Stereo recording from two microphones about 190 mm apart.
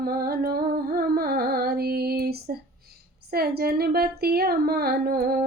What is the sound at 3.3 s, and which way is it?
Speech, 55° right (ahead or behind).